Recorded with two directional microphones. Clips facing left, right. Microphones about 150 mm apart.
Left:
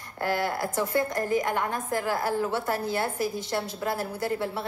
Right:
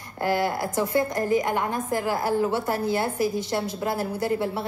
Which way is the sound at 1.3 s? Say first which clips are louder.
Right 3 dB; 10° right (ahead or behind).